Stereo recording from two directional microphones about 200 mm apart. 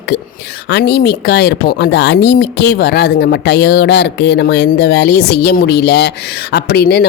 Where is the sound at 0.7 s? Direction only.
55° left (ahead or behind).